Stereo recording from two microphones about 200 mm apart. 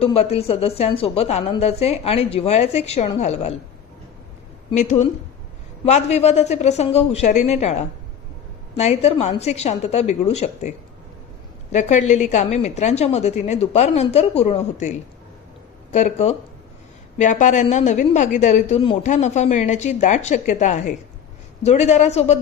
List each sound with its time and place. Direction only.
0.0 s a woman's voice: 30° left (ahead or behind)
4.7 s a woman's voice: 35° left (ahead or behind)